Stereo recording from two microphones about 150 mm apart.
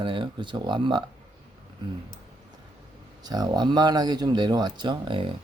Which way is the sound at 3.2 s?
25° right (ahead or behind).